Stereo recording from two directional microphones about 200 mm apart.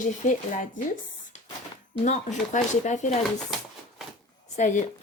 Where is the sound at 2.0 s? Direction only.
40° left (ahead or behind).